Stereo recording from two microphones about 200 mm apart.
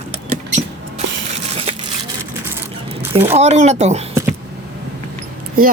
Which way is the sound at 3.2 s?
35° right (ahead or behind).